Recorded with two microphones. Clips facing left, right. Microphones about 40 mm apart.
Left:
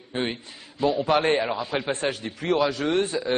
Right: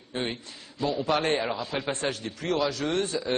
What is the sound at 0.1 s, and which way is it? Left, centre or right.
A man's voice, centre.